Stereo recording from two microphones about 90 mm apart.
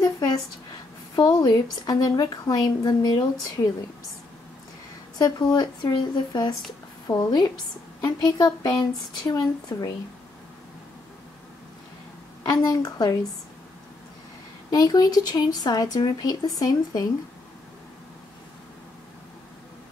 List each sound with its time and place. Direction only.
0.0 s a sound: 45° left (ahead or behind)
1.1 s a woman's voice: 45° left (ahead or behind)
5.2 s a woman's voice: 50° left (ahead or behind)
7.1 s a woman's voice: 35° left (ahead or behind)
8.0 s a woman's voice: 45° left (ahead or behind)
12.4 s a woman's voice: 45° left (ahead or behind)
14.7 s a woman's voice: 45° left (ahead or behind)